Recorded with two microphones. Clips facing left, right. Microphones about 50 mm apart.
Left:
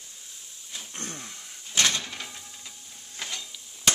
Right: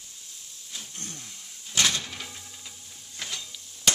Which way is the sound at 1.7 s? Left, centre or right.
Centre.